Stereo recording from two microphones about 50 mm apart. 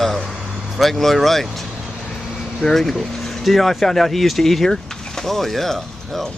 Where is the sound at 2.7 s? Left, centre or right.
Centre.